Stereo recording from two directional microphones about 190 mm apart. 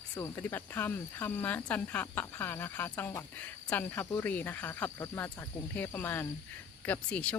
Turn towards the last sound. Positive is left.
turn(degrees=5)  # may be behind; listen again after turning